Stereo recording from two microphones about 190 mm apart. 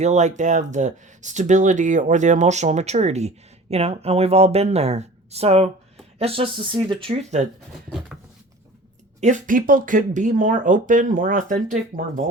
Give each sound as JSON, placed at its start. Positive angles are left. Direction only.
{"t": 0.0, "sound": "speech", "side_deg": -40}
{"t": 7.9, "sound": "a sound", "side_deg": 0}
{"t": 9.2, "sound": "speech", "side_deg": -45}